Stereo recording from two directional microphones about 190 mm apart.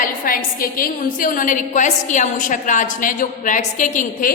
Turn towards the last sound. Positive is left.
turn(degrees=45)  # may be behind; listen again after turning